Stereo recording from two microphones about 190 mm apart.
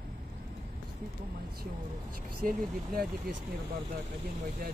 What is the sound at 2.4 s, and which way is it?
Speech, 45° right (ahead or behind).